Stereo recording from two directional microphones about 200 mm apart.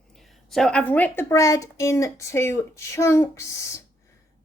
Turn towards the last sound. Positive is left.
turn(degrees=15)  # may be behind; listen again after turning